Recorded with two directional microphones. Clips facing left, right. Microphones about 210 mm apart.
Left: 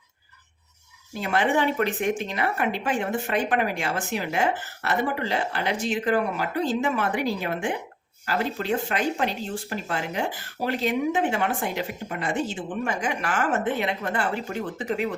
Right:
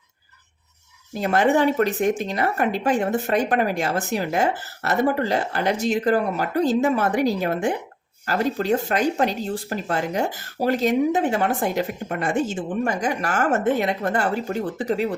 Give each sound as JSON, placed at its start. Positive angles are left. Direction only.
{"t": 1.1, "sound": "speech", "side_deg": -40}